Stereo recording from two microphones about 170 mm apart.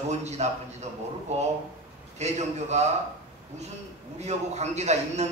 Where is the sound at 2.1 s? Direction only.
40° right (ahead or behind).